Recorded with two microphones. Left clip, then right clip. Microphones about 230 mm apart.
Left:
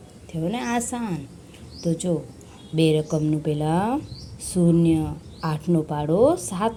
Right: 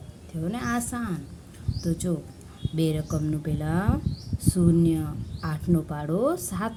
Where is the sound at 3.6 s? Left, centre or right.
Centre.